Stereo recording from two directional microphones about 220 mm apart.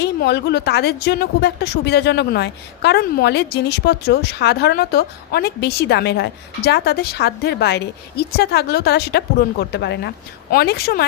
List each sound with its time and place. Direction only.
0.0 s a woman's voice: 50° left (ahead or behind)